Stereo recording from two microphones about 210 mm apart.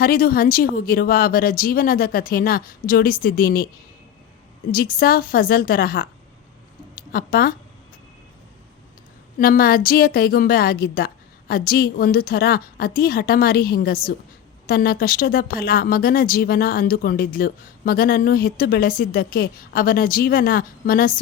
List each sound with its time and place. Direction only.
0.0 s speech: 45° left (ahead or behind)
4.7 s a woman's voice: 45° left (ahead or behind)
9.4 s speech: 45° left (ahead or behind)